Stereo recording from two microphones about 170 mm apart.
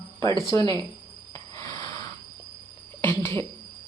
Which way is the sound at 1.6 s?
20° left (ahead or behind).